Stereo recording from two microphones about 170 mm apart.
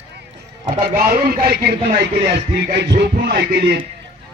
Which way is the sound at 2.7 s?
75° right (ahead or behind).